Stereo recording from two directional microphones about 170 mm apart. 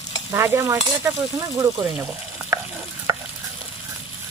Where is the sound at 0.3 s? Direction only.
15° right (ahead or behind).